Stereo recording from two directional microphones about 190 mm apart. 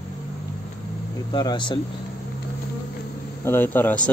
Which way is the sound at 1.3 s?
25° left (ahead or behind).